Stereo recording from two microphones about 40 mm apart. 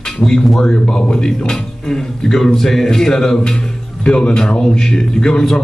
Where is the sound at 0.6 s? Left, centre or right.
Centre.